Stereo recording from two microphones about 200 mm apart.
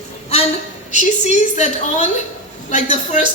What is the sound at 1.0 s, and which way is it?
A woman's voice, 35° left (ahead or behind).